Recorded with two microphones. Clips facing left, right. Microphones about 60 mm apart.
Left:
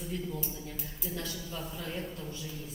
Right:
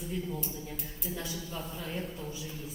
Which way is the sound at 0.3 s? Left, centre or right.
Centre.